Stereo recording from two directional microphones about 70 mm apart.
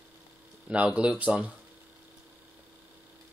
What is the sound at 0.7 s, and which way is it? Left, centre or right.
Speech, centre.